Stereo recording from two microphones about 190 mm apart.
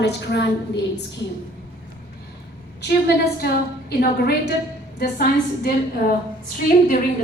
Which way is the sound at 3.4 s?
55° left (ahead or behind).